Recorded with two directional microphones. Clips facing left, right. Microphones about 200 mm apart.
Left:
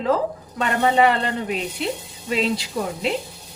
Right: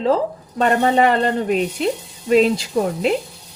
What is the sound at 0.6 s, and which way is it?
A woman's voice, 45° right (ahead or behind).